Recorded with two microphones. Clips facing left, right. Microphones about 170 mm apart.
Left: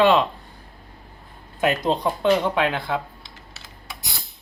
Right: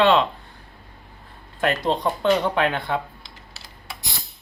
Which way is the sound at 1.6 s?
15° left (ahead or behind).